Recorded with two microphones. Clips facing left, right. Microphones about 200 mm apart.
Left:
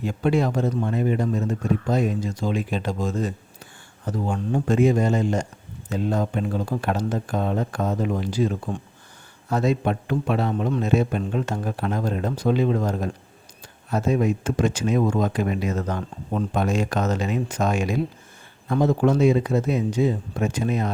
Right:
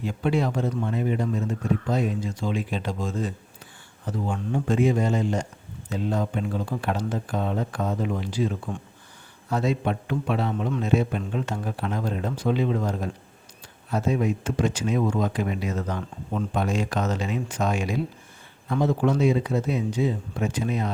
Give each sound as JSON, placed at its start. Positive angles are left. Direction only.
{"t": 0.0, "sound": "speech", "side_deg": 45}